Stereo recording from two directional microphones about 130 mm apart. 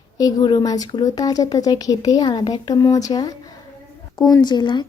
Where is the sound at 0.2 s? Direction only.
30° left (ahead or behind).